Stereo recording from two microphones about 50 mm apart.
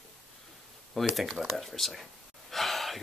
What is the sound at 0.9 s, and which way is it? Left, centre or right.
Speech, centre.